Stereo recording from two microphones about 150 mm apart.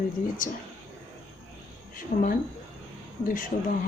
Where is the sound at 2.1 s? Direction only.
90° left.